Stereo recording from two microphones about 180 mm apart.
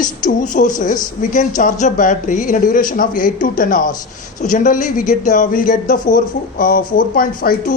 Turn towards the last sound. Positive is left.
turn(degrees=50)  # may be behind; listen again after turning